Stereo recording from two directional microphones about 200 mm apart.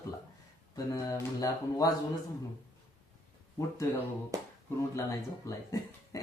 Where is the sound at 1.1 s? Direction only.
15° left (ahead or behind).